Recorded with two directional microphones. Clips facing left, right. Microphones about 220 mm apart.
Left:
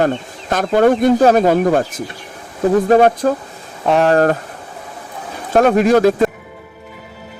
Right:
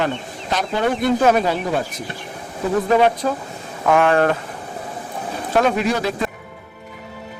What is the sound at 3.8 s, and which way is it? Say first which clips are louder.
Speech: left 3 dB; 35° left (ahead or behind).